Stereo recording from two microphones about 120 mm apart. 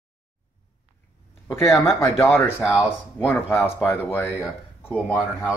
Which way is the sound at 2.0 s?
25° left (ahead or behind).